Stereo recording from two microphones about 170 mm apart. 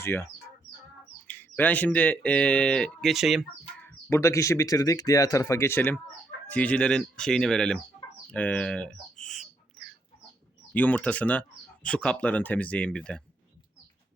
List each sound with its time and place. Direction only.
0.0 s speech: 15° left (ahead or behind)
1.3 s speech: 10° left (ahead or behind)
3.8 s speech: 15° left (ahead or behind)
8.3 s bird: 10° left (ahead or behind)
10.8 s speech: 10° left (ahead or behind)